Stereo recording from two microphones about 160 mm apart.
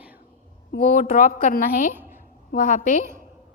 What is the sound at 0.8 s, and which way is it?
A woman's voice, 55° left (ahead or behind).